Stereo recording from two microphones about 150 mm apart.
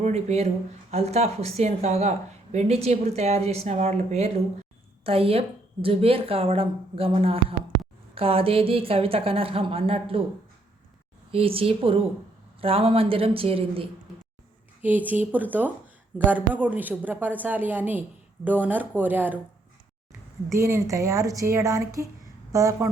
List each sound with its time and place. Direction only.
0.0 s a woman's voice: 45° right (ahead or behind)
11.3 s a woman's voice: 40° right (ahead or behind)
14.8 s a woman's voice: 10° right (ahead or behind)
20.6 s speech: 20° right (ahead or behind)